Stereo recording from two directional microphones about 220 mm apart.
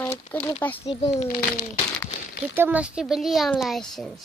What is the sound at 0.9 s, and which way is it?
Speech, 30° left (ahead or behind).